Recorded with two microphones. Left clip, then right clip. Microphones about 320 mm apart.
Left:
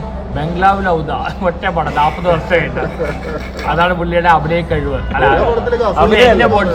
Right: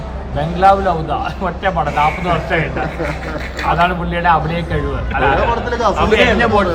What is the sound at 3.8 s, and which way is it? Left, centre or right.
A man's voice, centre.